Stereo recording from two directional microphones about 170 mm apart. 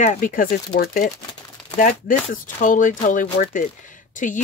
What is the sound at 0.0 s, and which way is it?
Speech, 45° left (ahead or behind).